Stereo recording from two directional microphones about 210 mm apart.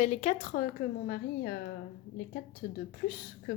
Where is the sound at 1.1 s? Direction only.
45° left (ahead or behind).